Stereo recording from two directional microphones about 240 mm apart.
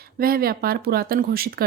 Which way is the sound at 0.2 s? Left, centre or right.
Right.